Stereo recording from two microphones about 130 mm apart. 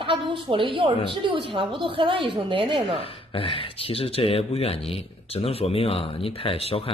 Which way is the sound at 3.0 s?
45° left (ahead or behind).